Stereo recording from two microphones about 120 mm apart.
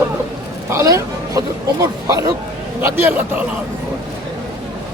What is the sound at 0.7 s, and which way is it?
Speech, 25° right (ahead or behind).